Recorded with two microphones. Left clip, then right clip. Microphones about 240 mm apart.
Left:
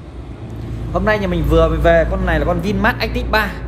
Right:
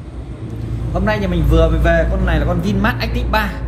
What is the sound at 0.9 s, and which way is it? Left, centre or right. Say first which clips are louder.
Speech: left 2 dB; left.